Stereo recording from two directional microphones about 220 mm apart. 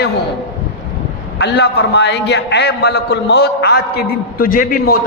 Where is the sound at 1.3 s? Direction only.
50° left (ahead or behind).